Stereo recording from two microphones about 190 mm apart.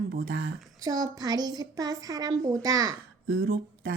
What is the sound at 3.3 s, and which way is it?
Speech, 60° right (ahead or behind).